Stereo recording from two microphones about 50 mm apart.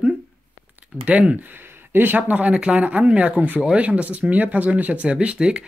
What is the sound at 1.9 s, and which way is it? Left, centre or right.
Speech, right.